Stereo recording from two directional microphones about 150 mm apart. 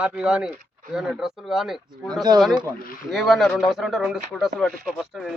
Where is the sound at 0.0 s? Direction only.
5° right (ahead or behind).